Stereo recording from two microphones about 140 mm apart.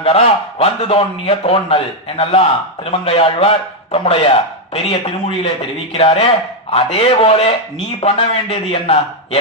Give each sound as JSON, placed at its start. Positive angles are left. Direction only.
{"t": 0.0, "sound": "a man's voice", "side_deg": 45}